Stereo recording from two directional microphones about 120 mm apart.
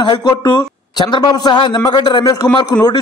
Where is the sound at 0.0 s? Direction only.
35° left (ahead or behind).